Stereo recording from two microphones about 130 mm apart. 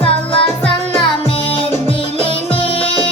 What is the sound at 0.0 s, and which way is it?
Music, 45° left (ahead or behind).